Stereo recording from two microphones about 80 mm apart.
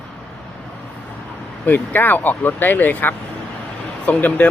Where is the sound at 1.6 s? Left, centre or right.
Left.